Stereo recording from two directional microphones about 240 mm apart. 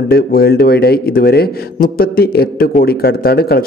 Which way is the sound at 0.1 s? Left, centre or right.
Left.